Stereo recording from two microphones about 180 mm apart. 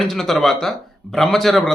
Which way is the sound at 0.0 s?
Centre (ahead or behind).